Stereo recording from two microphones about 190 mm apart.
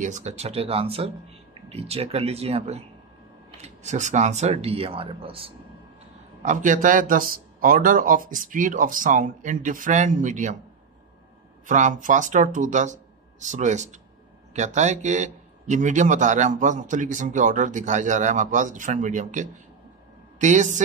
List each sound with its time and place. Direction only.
0.0 s a man's voice: 40° right (ahead or behind)
6.4 s a man's voice: 40° right (ahead or behind)
11.6 s a man's voice: 40° right (ahead or behind)